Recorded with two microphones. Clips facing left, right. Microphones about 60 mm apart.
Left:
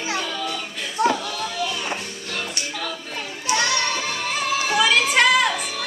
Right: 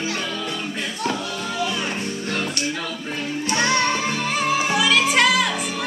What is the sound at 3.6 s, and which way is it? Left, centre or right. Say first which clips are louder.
Music: right 4 dB; right.